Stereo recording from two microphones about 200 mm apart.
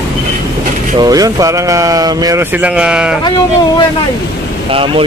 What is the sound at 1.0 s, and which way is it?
Speech, 20° right (ahead or behind).